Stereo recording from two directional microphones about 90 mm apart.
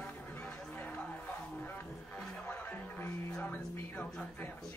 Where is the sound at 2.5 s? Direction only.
20° left (ahead or behind).